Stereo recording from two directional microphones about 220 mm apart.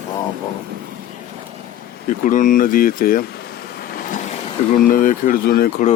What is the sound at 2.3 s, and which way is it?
Speech, 35° left (ahead or behind).